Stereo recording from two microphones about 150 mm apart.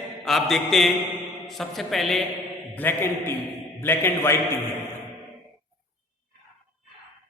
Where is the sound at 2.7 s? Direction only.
15° left (ahead or behind).